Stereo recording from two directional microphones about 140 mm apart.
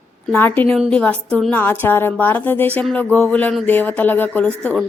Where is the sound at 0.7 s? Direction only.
5° left (ahead or behind).